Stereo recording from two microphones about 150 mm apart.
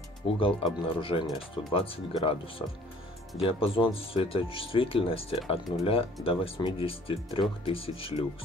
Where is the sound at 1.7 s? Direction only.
40° left (ahead or behind).